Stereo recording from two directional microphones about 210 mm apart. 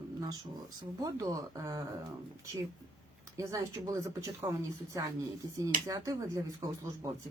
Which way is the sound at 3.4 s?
15° right (ahead or behind).